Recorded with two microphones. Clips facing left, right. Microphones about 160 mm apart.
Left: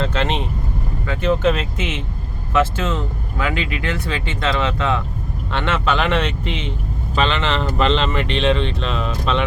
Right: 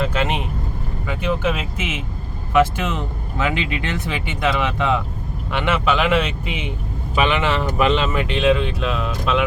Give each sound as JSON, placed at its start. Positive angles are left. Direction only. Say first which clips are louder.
{"t": 0.0, "sound": "speech", "louder": "even", "side_deg": -10}